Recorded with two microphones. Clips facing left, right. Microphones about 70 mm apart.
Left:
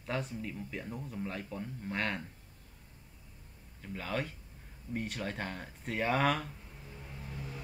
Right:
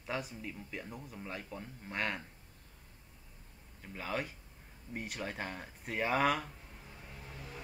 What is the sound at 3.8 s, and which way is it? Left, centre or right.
Speech, centre.